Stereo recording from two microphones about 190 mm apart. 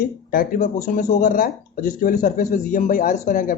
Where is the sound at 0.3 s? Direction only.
50° left (ahead or behind).